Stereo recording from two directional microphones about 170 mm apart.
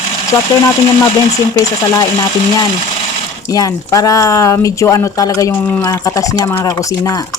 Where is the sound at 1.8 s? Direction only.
20° left (ahead or behind).